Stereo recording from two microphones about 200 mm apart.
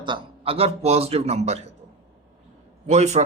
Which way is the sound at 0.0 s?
25° right (ahead or behind).